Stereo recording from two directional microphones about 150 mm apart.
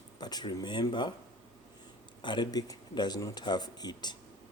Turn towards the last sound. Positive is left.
turn(degrees=30)  # may be behind; listen again after turning